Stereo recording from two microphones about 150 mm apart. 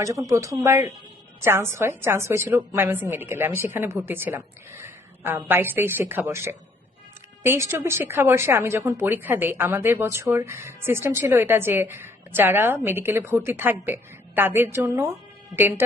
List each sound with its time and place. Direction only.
0.3 s speech: 20° right (ahead or behind)